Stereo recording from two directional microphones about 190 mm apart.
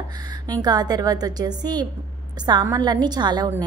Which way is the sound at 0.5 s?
20° right (ahead or behind).